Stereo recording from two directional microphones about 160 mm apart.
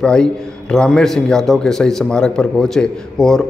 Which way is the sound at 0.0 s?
5° left (ahead or behind).